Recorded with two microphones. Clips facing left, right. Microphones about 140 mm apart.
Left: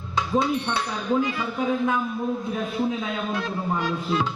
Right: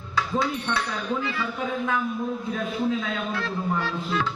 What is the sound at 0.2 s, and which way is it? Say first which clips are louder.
Speech: left 3 dB; 25° left (ahead or behind).